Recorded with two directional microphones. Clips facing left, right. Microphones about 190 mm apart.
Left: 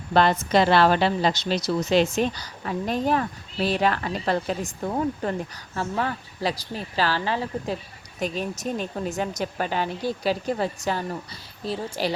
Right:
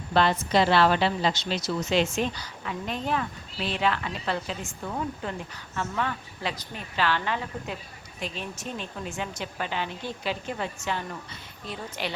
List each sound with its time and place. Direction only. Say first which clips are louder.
0.1 s a woman's voice: left 3 dB; 45° left (ahead or behind)